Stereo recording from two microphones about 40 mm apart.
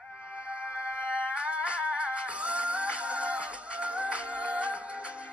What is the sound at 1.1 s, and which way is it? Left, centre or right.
Music, centre.